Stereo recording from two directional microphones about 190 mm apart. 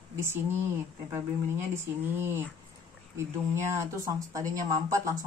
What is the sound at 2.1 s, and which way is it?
Speech, 10° right (ahead or behind).